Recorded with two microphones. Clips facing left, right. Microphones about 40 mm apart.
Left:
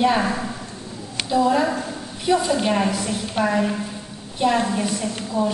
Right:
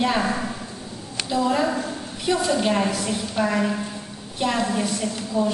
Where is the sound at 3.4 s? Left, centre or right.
Left.